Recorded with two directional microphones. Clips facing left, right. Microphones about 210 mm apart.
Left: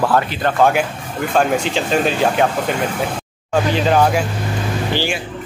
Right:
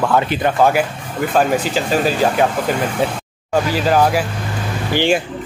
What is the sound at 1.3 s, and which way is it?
Speech, 5° right (ahead or behind).